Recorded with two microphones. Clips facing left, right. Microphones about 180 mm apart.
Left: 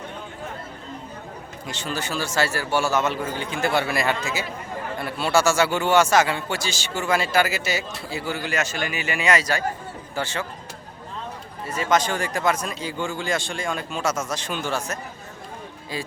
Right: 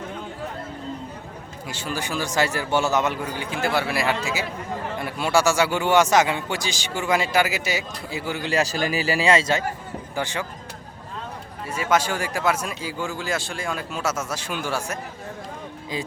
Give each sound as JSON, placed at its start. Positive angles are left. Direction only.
{"t": 1.6, "sound": "a man's voice", "side_deg": -10}
{"t": 3.3, "sound": "a man's voice", "side_deg": -5}
{"t": 8.4, "sound": "a man's voice", "side_deg": -35}
{"t": 11.6, "sound": "a man's voice", "side_deg": -10}